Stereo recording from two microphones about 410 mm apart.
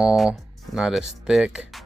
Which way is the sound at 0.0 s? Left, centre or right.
Centre.